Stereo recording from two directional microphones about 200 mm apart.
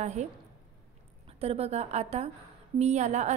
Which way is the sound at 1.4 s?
30° right (ahead or behind).